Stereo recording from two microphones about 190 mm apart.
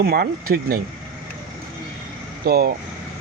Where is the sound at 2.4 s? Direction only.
55° right (ahead or behind).